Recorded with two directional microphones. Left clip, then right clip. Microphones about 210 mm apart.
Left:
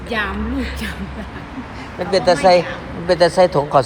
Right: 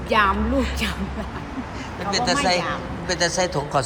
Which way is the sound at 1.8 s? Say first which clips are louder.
Left 6 dB; 5° right (ahead or behind).